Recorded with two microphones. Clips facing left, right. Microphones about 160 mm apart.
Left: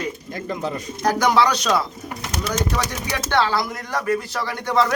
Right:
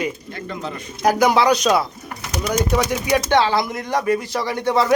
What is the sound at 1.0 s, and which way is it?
Speech, 10° right (ahead or behind).